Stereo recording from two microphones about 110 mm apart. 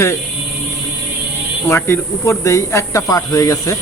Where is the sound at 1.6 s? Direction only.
25° left (ahead or behind).